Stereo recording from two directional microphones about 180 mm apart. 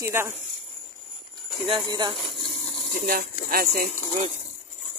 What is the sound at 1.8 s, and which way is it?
Speech, 25° right (ahead or behind).